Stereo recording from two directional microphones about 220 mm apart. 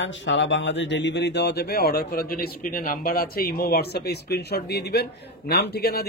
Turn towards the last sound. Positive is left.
turn(degrees=45)  # may be behind; listen again after turning